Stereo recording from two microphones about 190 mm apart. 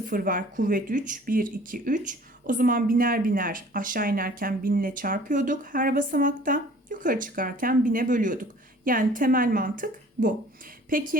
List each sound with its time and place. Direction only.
0.0 s speech: 45° right (ahead or behind)